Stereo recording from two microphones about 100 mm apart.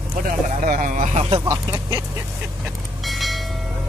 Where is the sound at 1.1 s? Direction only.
90° right.